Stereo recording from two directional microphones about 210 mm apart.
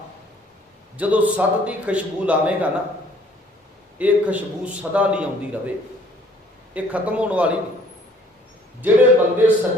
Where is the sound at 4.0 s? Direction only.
5° right (ahead or behind).